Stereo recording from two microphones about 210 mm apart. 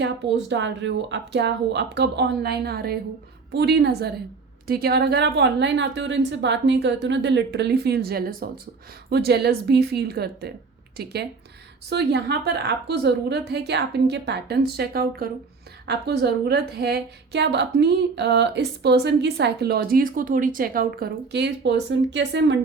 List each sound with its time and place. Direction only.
0.0 s a woman's voice: 60° right (ahead or behind)